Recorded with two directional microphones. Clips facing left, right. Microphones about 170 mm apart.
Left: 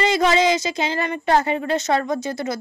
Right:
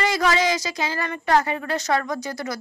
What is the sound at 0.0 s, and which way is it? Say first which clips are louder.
Speech: left 4 dB; 25° left (ahead or behind).